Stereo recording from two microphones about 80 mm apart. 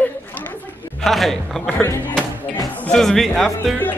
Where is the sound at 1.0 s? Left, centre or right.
Centre.